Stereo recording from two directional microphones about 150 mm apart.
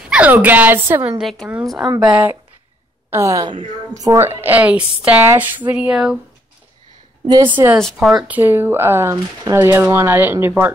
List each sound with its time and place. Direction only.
0.0 s a woman's voice: 10° right (ahead or behind)
1.1 s a woman's voice: centre (ahead or behind)
3.1 s a woman's voice: 20° right (ahead or behind)
7.2 s a woman's voice: 30° right (ahead or behind)
7.5 s a woman's voice: 15° right (ahead or behind)
7.8 s speech: centre (ahead or behind)
8.4 s a woman's voice: 15° right (ahead or behind)